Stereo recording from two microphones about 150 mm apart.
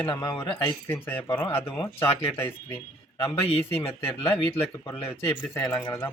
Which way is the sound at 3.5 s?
40° left (ahead or behind).